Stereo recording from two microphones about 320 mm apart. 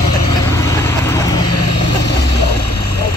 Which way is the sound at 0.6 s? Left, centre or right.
Centre.